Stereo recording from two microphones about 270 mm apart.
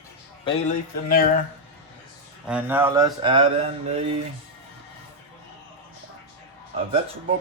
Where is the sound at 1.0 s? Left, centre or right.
Left.